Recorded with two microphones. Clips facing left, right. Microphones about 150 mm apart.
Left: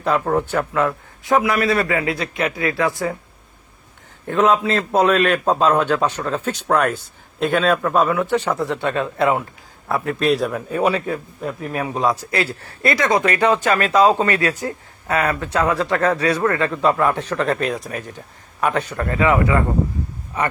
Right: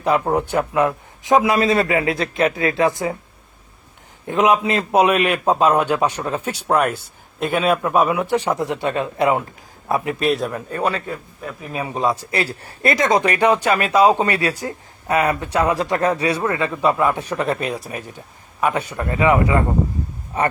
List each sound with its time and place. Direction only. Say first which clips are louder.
0.0 s a man's voice: right 1 dB; 15° right (ahead or behind)
4.3 s a man's voice: even; 15° right (ahead or behind)
10.2 s a man's voice: left 5 dB; centre (ahead or behind)
11.7 s a man's voice: even; 5° right (ahead or behind)
12.1 s a man's voice: left 1 dB; 30° right (ahead or behind)